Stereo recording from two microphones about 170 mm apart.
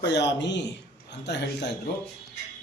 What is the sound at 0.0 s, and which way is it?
Speech, 90° left.